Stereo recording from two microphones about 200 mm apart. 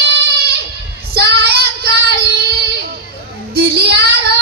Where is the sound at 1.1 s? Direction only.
50° right (ahead or behind).